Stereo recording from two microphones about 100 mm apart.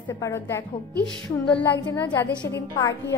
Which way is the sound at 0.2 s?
25° left (ahead or behind).